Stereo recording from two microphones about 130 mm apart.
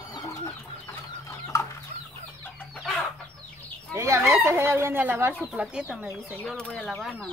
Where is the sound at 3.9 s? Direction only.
20° right (ahead or behind).